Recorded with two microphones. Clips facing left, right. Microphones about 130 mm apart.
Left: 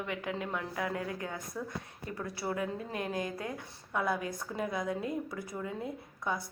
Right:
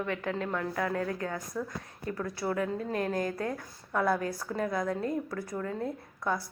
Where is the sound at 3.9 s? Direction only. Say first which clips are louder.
Right 4 dB; 15° left (ahead or behind).